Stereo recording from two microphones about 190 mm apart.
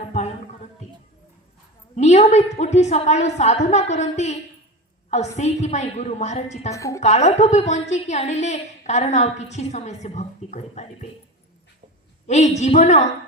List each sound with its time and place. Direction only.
2.0 s a sound: 35° left (ahead or behind)
2.6 s a woman's voice: 35° left (ahead or behind)
6.7 s a woman's voice: 15° left (ahead or behind)
7.0 s a woman's voice: 35° left (ahead or behind)
12.3 s a woman's voice: 35° left (ahead or behind)